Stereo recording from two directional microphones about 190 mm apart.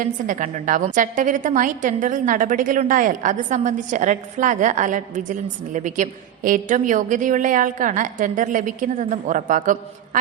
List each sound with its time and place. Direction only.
0.0 s a woman's voice: 45° right (ahead or behind)